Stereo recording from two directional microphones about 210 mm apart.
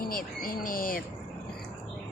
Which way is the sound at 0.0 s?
45° left (ahead or behind).